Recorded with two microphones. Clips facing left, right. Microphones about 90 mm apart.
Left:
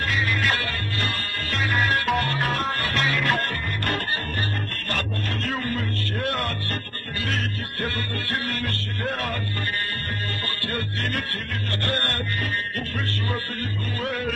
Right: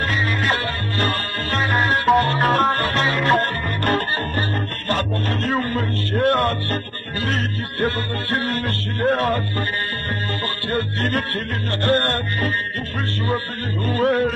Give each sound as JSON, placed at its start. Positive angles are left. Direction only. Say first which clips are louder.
{"t": 0.1, "sound": "music", "louder": "right 3 dB", "side_deg": -35}
{"t": 10.7, "sound": "music", "louder": "right 7 dB", "side_deg": -40}
{"t": 13.8, "sound": "music", "louder": "right 11 dB", "side_deg": -40}